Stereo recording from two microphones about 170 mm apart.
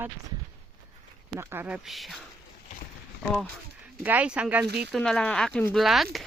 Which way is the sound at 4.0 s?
10° right (ahead or behind).